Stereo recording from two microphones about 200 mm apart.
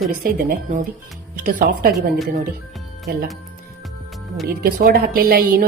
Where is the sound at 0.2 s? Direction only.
45° right (ahead or behind).